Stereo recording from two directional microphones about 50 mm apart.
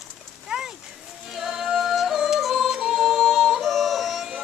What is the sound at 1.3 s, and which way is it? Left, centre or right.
Yodeling, centre.